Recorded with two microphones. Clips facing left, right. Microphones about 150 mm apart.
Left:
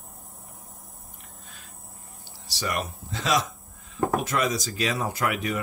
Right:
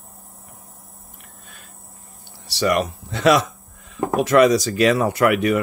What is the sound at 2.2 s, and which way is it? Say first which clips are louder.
Speech: right 11 dB; 60° right (ahead or behind).